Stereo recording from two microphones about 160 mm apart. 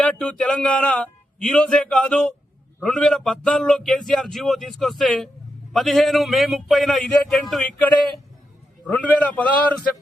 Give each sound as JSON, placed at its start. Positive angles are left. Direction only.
{"t": 0.0, "sound": "a man's voice", "side_deg": 10}